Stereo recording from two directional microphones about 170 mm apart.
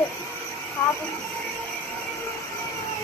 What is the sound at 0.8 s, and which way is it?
Speech, 15° left (ahead or behind).